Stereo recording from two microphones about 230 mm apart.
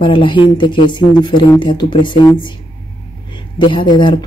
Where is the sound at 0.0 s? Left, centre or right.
Left.